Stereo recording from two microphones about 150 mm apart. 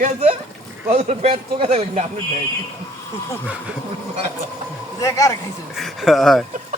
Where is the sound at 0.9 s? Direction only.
45° right (ahead or behind).